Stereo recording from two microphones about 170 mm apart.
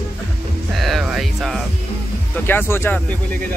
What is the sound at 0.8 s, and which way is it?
Music, centre (ahead or behind).